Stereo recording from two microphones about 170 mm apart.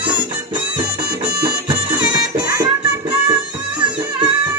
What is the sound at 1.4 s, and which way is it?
Music, 25° right (ahead or behind).